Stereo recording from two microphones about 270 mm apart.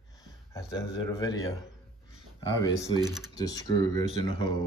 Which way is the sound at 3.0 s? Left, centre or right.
Centre.